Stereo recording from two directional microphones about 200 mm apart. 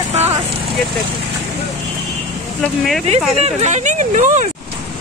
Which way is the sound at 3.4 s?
35° right (ahead or behind).